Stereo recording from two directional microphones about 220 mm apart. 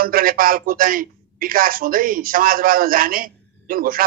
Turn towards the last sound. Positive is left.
turn(degrees=-40)  # may be behind; listen again after turning